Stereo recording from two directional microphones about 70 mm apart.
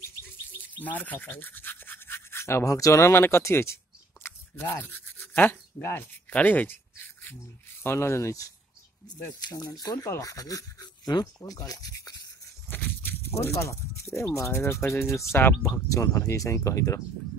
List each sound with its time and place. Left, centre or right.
0.8 s toothbrush: left
2.6 s speech: left
4.6 s rub: left
6.3 s a sound: left
7.8 s speech: left
9.3 s speech: left
12.6 s a sound: left
13.3 s speech: left